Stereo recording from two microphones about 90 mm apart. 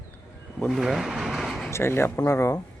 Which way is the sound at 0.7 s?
5° right (ahead or behind).